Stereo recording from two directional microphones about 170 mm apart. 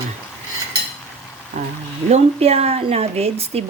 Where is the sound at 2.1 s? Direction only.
40° right (ahead or behind).